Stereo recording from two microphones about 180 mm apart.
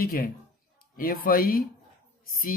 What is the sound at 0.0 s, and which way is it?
Speech, 55° left (ahead or behind).